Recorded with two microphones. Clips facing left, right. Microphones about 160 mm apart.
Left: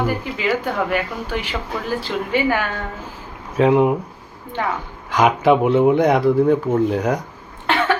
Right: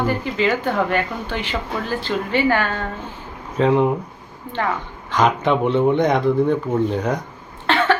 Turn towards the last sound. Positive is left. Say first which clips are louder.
# right 1 dB
turn(degrees=10)  # may be behind; listen again after turning